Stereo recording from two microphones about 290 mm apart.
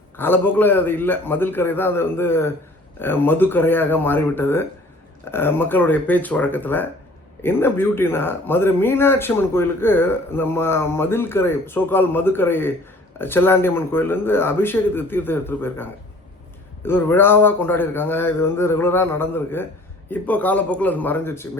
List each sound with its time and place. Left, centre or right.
0.2 s speech: centre